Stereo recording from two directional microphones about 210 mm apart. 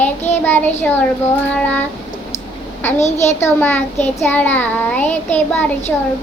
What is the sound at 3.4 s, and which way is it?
Child singing, 10° left (ahead or behind).